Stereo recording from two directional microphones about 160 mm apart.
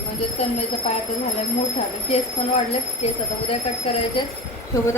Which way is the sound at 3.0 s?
40° left (ahead or behind).